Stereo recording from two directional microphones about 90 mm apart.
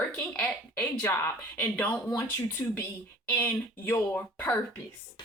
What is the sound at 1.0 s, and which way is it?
Speech, 35° left (ahead or behind).